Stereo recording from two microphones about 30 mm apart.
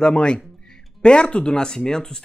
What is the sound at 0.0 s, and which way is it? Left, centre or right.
Speech, left.